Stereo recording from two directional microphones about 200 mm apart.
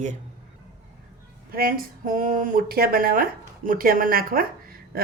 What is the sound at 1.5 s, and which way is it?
Speech, 45° right (ahead or behind).